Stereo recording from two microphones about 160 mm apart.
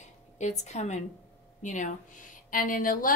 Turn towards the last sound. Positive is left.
turn(degrees=55)  # may be behind; listen again after turning